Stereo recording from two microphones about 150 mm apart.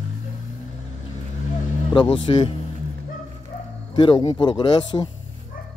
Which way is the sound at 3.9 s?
30° left (ahead or behind).